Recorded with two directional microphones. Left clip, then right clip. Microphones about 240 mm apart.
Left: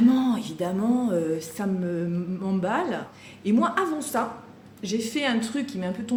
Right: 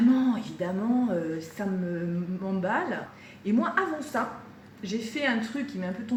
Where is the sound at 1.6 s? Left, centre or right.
Left.